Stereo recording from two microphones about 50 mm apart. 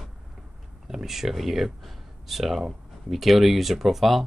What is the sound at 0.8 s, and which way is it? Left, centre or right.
Speech, centre.